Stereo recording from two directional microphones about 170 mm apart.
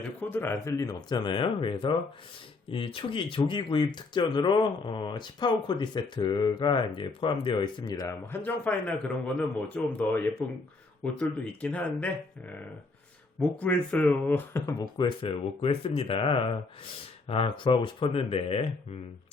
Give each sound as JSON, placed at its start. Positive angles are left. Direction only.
{"t": 0.2, "sound": "speech", "side_deg": 10}
{"t": 13.6, "sound": "speech", "side_deg": 10}